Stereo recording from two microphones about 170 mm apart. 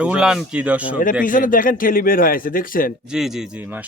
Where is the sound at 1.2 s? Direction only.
55° left (ahead or behind).